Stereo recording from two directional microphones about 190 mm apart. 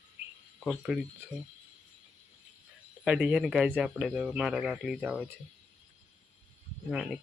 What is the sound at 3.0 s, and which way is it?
Speech, 5° right (ahead or behind).